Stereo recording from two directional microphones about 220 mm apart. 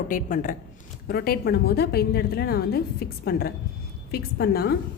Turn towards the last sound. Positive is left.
turn(degrees=45)  # may be behind; listen again after turning